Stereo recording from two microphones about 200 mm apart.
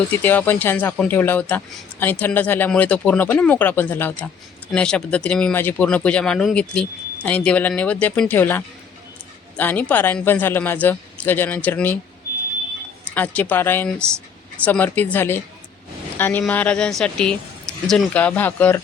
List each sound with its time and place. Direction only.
0.1 s speech: 10° left (ahead or behind)
13.1 s speech: 10° left (ahead or behind)